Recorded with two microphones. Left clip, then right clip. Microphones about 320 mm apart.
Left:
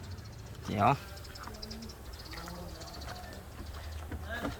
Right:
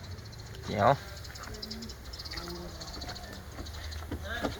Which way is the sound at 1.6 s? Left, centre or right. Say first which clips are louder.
Right 3 dB; centre.